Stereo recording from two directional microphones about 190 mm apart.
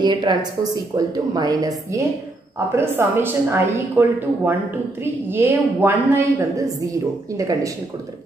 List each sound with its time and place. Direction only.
0.0 s a woman's voice: 20° right (ahead or behind)